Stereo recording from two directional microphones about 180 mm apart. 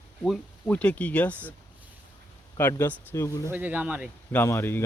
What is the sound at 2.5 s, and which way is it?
Speech, 10° left (ahead or behind).